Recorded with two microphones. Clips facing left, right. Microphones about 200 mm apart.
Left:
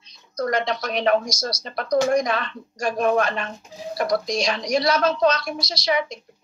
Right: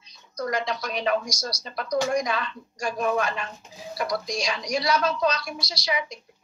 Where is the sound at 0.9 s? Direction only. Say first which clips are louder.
Left 6 dB; 80° left.